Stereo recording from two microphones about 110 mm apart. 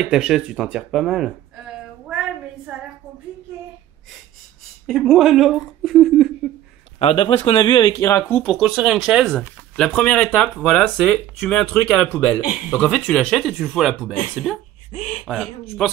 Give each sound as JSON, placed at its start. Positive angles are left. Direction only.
{"t": 0.0, "sound": "a sound", "side_deg": -5}
{"t": 4.8, "sound": "speech", "side_deg": 5}
{"t": 7.0, "sound": "speech", "side_deg": 65}
{"t": 8.0, "sound": "speech", "side_deg": 20}
{"t": 8.4, "sound": "speech", "side_deg": 0}
{"t": 14.9, "sound": "speech", "side_deg": 90}
{"t": 15.2, "sound": "speech", "side_deg": 0}